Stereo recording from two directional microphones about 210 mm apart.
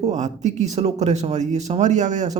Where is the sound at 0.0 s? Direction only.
35° right (ahead or behind).